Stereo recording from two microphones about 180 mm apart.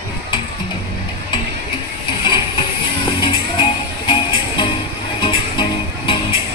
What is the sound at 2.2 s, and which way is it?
Vehicle, 25° left (ahead or behind).